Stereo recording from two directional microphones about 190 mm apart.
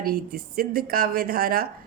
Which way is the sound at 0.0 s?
50° right (ahead or behind).